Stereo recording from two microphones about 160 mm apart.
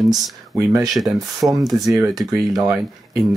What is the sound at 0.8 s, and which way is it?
Speech, centre (ahead or behind).